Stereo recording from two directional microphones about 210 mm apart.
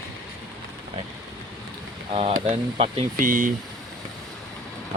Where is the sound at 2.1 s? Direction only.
25° right (ahead or behind).